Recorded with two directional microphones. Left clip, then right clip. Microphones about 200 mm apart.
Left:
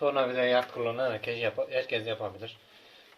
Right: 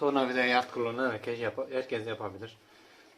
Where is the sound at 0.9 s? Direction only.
30° right (ahead or behind).